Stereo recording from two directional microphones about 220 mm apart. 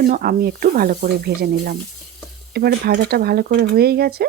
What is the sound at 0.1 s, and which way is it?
Speech, 40° right (ahead or behind).